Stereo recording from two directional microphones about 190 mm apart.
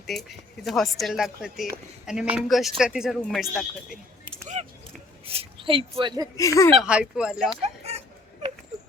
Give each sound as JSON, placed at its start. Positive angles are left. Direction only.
{"t": 0.1, "sound": "speech", "side_deg": 0}
{"t": 4.5, "sound": "a sound", "side_deg": -35}
{"t": 5.2, "sound": "speech", "side_deg": -30}
{"t": 6.3, "sound": "speech", "side_deg": 15}
{"t": 6.7, "sound": "speech", "side_deg": -5}
{"t": 7.6, "sound": "a sound", "side_deg": -35}